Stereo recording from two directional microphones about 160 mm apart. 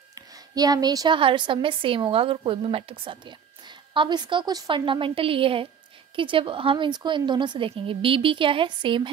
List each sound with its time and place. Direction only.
0.1 s a woman's voice: 25° right (ahead or behind)